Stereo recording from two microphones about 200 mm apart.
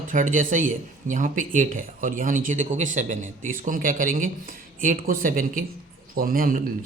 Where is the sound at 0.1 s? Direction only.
40° right (ahead or behind).